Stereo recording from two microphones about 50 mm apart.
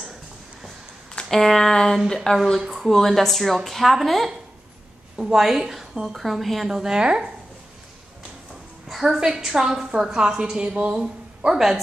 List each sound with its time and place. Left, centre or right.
1.3 s a sound: centre
2.7 s a woman's voice: centre
5.1 s a woman's voice: centre
8.8 s a woman's voice: centre
10.7 s speech: right
11.0 s speech: centre